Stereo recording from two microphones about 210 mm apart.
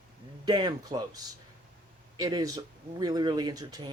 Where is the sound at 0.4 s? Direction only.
20° right (ahead or behind).